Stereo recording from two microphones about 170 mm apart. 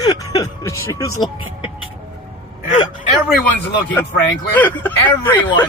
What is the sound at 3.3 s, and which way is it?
Speech, 10° left (ahead or behind).